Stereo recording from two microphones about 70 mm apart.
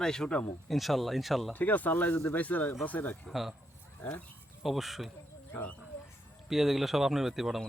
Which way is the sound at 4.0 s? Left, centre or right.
Centre.